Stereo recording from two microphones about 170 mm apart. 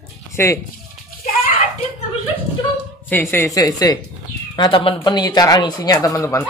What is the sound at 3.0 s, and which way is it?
Speech, 10° left (ahead or behind).